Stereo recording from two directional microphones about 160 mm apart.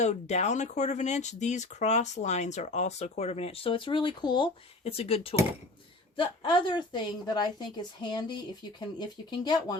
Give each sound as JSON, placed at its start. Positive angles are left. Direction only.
{"t": 0.0, "sound": "speech", "side_deg": 45}
{"t": 6.4, "sound": "a woman's voice", "side_deg": 30}